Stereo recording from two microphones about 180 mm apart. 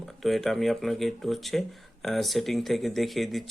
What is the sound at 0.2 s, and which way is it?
Speech, centre (ahead or behind).